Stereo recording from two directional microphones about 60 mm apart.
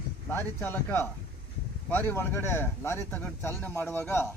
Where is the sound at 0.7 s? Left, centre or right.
Left.